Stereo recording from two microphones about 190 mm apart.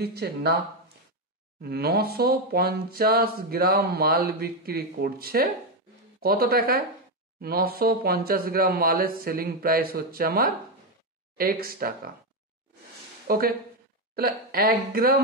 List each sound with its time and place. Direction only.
0.0 s speech: 60° right (ahead or behind)
1.6 s speech: 55° right (ahead or behind)
13.3 s speech: 50° right (ahead or behind)